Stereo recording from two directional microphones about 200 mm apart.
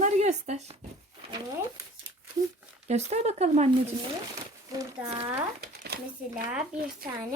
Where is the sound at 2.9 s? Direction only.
35° right (ahead or behind).